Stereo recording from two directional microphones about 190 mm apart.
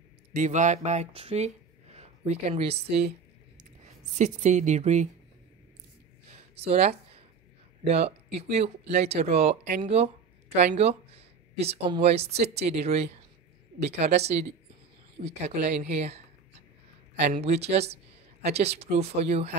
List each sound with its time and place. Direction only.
0.3 s speech: 40° right (ahead or behind)
4.1 s speech: 40° right (ahead or behind)
6.7 s speech: 35° right (ahead or behind)
17.2 s speech: 35° right (ahead or behind)